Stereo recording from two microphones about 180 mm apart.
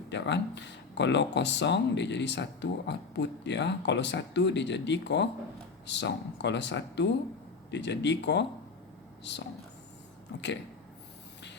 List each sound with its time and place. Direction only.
0.1 s speech: 75° left (ahead or behind)